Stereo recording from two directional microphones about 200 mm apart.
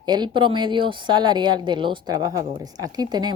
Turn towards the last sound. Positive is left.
turn(degrees=-20)  # may be behind; listen again after turning